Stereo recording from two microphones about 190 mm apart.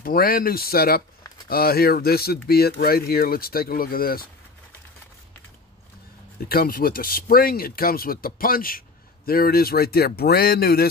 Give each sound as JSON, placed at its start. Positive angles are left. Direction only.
{"t": 0.0, "sound": "speech", "side_deg": 50}
{"t": 6.5, "sound": "speech", "side_deg": 50}